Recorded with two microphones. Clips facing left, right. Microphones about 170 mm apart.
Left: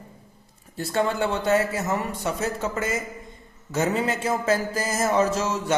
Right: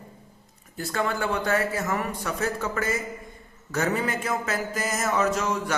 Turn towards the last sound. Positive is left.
turn(degrees=25)  # may be behind; listen again after turning